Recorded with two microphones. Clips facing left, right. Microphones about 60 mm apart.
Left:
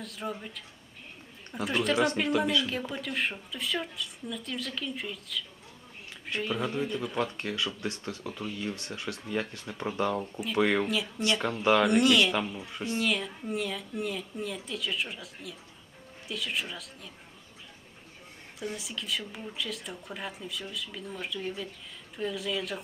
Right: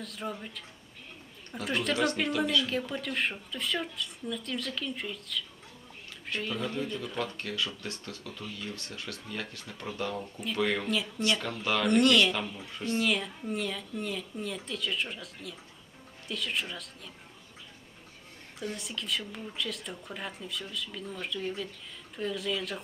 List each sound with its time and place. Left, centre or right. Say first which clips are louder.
0.0 s speech: left 1 dB; centre
1.6 s speech: left 2 dB; centre
6.4 s speech: left 3 dB; centre
10.8 s speech: even; centre
11.3 s speech: left 6 dB; left
11.9 s speech: even; centre
12.4 s speech: left 3 dB; centre
13.0 s speech: even; centre
18.6 s speech: even; centre